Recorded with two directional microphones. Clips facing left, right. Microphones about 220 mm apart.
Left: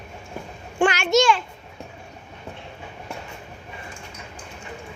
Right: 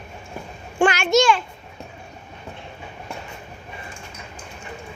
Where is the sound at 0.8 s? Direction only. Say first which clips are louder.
Right 1 dB; 45° right (ahead or behind).